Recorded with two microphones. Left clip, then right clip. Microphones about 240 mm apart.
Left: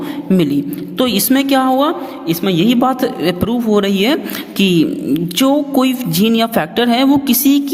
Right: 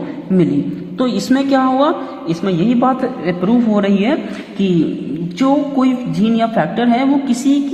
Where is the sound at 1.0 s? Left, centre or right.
Left.